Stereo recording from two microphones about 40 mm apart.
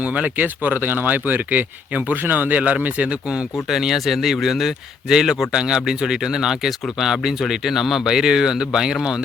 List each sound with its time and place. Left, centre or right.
0.0 s speech: right
0.4 s speech: right
2.6 s speech: right
3.7 s speech: centre
5.0 s speech: centre